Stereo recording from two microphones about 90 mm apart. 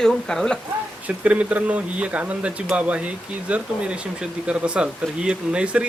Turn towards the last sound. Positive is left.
turn(degrees=-10)  # may be behind; listen again after turning